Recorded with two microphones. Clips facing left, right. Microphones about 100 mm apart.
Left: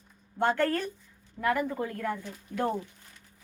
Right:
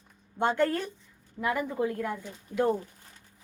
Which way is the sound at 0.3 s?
20° right (ahead or behind).